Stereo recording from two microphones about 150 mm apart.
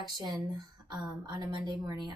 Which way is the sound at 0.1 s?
30° right (ahead or behind).